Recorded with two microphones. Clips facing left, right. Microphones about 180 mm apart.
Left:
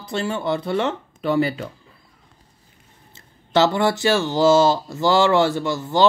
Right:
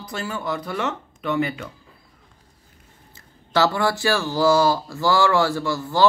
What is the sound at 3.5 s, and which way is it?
Speech, 20° left (ahead or behind).